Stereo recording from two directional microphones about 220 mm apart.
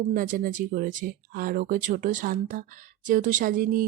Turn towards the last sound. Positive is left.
turn(degrees=-40)  # may be behind; listen again after turning